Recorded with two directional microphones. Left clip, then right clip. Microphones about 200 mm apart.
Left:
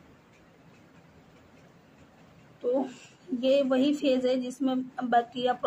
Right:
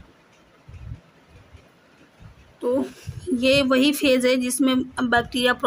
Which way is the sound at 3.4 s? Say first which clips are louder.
Right 6 dB; 55° right (ahead or behind).